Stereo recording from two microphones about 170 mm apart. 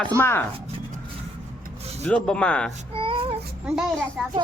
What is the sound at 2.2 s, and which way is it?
Speech, 5° left (ahead or behind).